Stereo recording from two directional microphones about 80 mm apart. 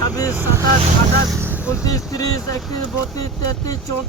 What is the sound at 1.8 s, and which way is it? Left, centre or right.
Speech, left.